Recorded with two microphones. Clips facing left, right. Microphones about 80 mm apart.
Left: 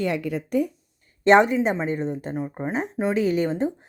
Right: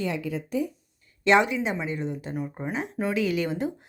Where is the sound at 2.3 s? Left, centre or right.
Left.